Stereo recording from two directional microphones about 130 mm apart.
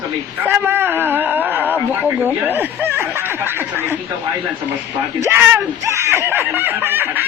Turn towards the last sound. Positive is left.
turn(degrees=-15)  # may be behind; listen again after turning